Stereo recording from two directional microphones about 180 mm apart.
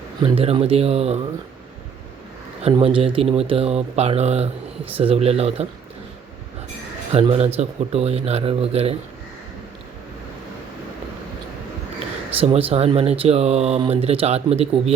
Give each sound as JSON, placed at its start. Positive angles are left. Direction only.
{"t": 0.2, "sound": "speech", "side_deg": -30}
{"t": 2.8, "sound": "speech", "side_deg": -30}
{"t": 7.1, "sound": "speech", "side_deg": -30}
{"t": 12.4, "sound": "speech", "side_deg": -30}